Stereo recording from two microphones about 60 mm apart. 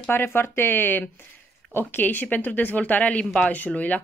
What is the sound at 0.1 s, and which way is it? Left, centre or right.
Speech, left.